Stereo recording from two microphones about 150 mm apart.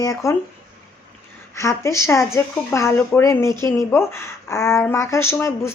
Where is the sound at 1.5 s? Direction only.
20° left (ahead or behind).